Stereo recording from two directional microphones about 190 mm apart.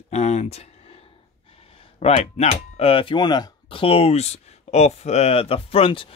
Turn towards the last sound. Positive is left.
turn(degrees=30)  # may be behind; listen again after turning